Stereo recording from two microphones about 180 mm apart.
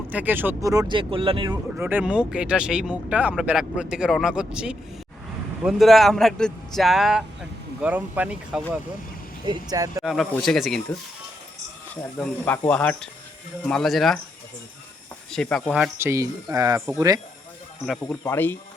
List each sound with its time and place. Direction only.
0.1 s speech: 10° right (ahead or behind); by 1.5 s 30° right (ahead or behind)
1.7 s speech: 10° right (ahead or behind)
9.5 s speech: 20° right (ahead or behind)
10.0 s speech: centre (ahead or behind)
12.1 s speech: 10° left (ahead or behind)
15.3 s speech: 5° left (ahead or behind)
15.7 s speech: 10° right (ahead or behind)
17.8 s speech: 5° left (ahead or behind)
18.2 s speech: 15° left (ahead or behind)